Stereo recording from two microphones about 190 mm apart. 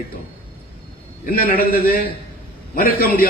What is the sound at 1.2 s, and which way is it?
Speech, 50° left (ahead or behind).